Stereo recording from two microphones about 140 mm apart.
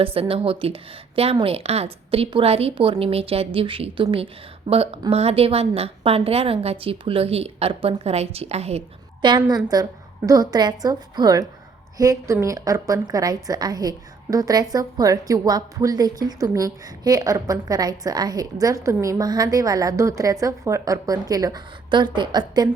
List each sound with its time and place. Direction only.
0.0 s a woman's voice: 40° right (ahead or behind)
9.2 s a woman's voice: 35° right (ahead or behind)